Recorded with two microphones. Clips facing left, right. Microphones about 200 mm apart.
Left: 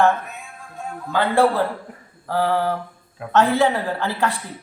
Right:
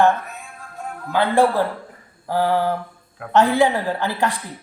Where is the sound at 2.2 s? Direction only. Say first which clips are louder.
Right 1 dB; 15° right (ahead or behind).